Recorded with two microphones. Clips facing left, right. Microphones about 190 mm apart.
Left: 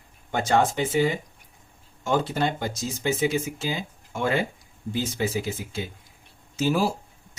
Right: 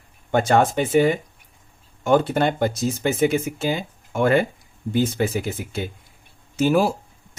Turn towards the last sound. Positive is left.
turn(degrees=-55)  # may be behind; listen again after turning